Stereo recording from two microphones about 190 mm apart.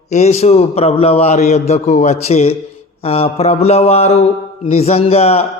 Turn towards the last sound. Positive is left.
turn(degrees=35)  # may be behind; listen again after turning